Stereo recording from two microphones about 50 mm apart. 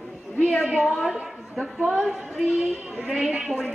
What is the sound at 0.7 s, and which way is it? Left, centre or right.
A woman's voice, centre.